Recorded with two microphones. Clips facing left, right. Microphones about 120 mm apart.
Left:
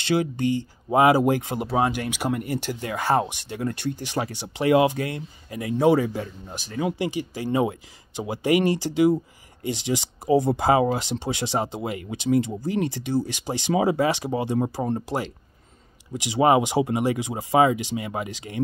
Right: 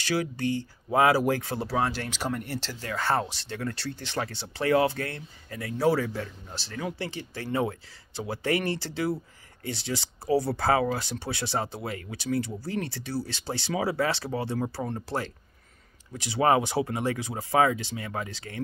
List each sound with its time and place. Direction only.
0.0 s speech: 20° left (ahead or behind)